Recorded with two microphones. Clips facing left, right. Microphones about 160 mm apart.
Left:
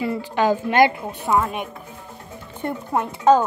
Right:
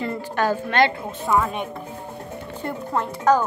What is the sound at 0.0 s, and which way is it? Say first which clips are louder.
A woman's voice: left 3 dB; 10° left (ahead or behind).